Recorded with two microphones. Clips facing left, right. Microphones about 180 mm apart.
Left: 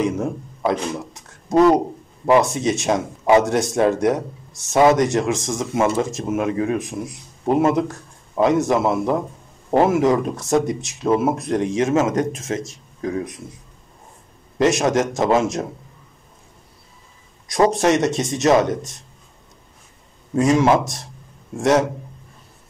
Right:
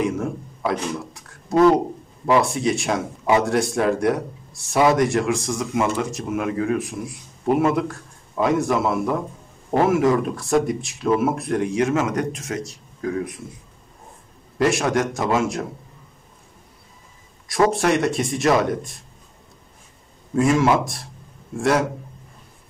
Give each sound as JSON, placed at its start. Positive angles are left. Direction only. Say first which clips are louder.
{"t": 0.0, "sound": "speech", "louder": "left 2 dB", "side_deg": 20}
{"t": 2.2, "sound": "a man's voice", "louder": "left 2 dB", "side_deg": 20}
{"t": 14.6, "sound": "speech", "louder": "left 2 dB", "side_deg": 20}
{"t": 17.5, "sound": "speech", "louder": "left 2 dB", "side_deg": 20}
{"t": 20.3, "sound": "speech", "louder": "left 2 dB", "side_deg": 20}